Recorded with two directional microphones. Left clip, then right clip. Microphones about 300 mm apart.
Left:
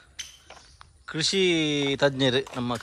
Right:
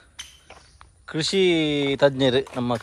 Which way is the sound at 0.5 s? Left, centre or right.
Centre.